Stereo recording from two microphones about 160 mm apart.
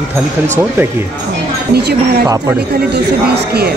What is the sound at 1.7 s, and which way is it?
Speech, 85° right.